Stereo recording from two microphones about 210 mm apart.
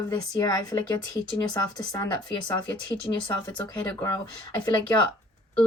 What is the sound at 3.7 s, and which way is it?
Speech, 15° left (ahead or behind).